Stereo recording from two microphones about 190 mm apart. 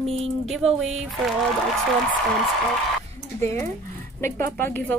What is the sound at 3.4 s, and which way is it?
Speech, 15° left (ahead or behind).